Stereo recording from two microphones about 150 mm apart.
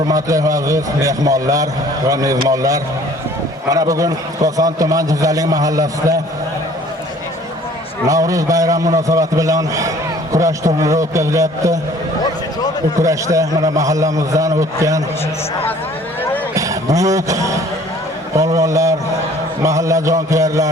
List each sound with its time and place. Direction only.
0.1 s a man's voice: 20° right (ahead or behind)
8.0 s a man's voice: 20° right (ahead or behind)
13.0 s a man's voice: 20° right (ahead or behind)
16.6 s a man's voice: 20° right (ahead or behind)